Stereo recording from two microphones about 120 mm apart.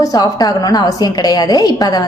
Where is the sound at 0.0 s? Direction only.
30° left (ahead or behind).